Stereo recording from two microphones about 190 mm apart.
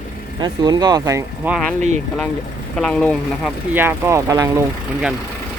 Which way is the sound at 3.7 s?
10° right (ahead or behind).